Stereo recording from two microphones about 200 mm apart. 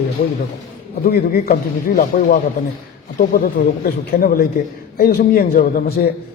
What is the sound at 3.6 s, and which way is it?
A man's voice, 40° left (ahead or behind).